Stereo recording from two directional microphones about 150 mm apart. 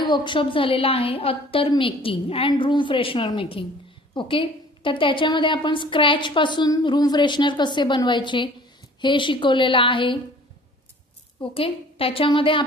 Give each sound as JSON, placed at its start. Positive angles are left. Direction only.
{"t": 0.0, "sound": "a woman's voice", "side_deg": 30}
{"t": 11.5, "sound": "a woman's voice", "side_deg": 40}